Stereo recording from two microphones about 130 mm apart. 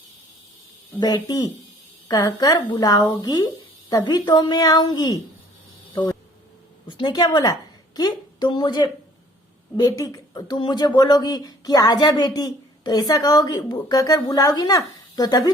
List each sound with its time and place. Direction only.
0.9 s a woman's voice: 30° left (ahead or behind)
5.9 s a sound: 25° left (ahead or behind)
6.8 s a woman's voice: 35° left (ahead or behind)